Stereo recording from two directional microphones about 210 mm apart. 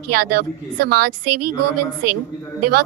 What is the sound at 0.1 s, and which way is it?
A woman's voice, 45° right (ahead or behind).